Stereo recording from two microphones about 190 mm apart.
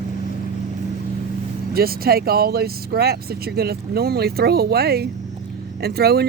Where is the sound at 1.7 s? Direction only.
55° right (ahead or behind).